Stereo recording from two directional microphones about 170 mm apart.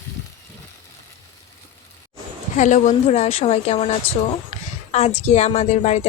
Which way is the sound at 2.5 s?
45° left (ahead or behind).